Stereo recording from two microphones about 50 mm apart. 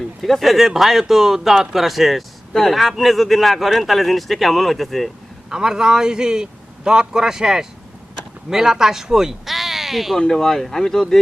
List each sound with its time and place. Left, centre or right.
0.2 s speech: centre
5.5 s a man's voice: centre
10.2 s speech: centre